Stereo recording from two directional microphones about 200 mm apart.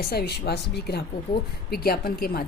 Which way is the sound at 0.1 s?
50° left (ahead or behind).